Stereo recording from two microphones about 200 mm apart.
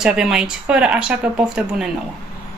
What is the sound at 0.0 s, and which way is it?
Speech, 5° right (ahead or behind).